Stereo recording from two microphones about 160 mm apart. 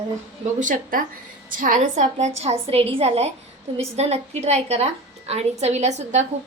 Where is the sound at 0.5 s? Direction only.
55° right (ahead or behind).